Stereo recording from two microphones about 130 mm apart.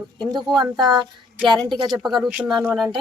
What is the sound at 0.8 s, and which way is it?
Speech, 35° right (ahead or behind).